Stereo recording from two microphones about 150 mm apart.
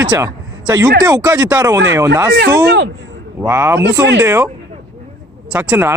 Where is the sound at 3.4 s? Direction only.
15° right (ahead or behind).